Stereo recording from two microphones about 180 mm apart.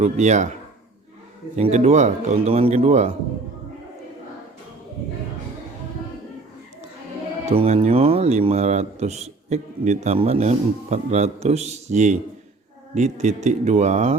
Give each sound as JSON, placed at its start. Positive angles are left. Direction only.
{"t": 0.0, "sound": "a man's voice", "side_deg": -40}
{"t": 1.5, "sound": "a man's voice", "side_deg": -40}
{"t": 7.5, "sound": "a man's voice", "side_deg": -35}